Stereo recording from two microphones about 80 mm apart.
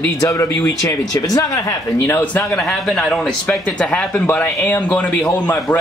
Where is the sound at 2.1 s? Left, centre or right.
Left.